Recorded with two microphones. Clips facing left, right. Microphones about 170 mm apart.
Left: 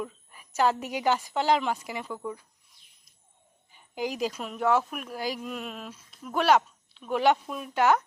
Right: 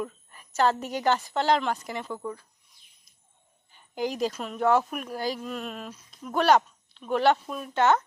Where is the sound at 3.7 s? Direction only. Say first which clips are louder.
Right 2 dB; 5° left (ahead or behind).